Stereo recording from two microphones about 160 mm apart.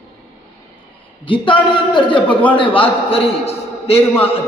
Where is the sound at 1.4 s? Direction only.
30° left (ahead or behind).